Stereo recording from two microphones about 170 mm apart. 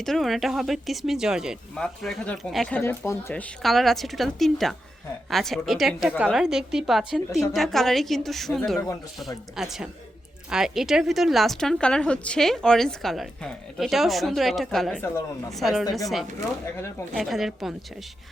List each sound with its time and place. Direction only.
0.0 s speech: centre (ahead or behind)
15.0 s speech: 15° left (ahead or behind)
15.5 s speech: centre (ahead or behind)
17.2 s speech: centre (ahead or behind)